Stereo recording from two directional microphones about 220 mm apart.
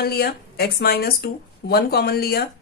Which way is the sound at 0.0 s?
45° left (ahead or behind).